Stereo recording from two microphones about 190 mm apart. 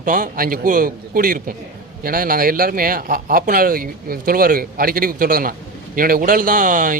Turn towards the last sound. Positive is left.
turn(degrees=-45)  # may be behind; listen again after turning